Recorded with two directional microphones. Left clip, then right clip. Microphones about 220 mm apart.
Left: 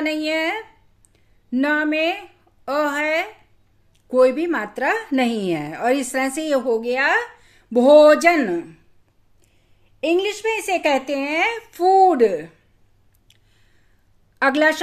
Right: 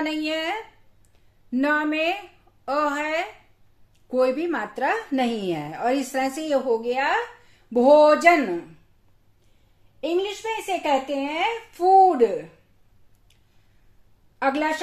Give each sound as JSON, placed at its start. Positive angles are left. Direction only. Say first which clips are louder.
{"t": 0.0, "sound": "a woman's voice", "louder": "left 4 dB", "side_deg": 30}
{"t": 9.9, "sound": "a woman's voice", "louder": "left 5 dB", "side_deg": 45}
{"t": 14.4, "sound": "a woman's voice", "louder": "left 6 dB", "side_deg": 40}